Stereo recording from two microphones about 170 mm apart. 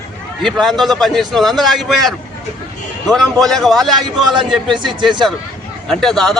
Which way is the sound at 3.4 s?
Centre (ahead or behind).